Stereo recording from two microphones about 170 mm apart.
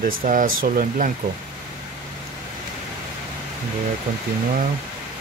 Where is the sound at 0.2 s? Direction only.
55° right (ahead or behind).